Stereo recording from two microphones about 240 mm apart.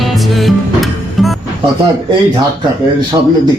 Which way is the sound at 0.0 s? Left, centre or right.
Centre.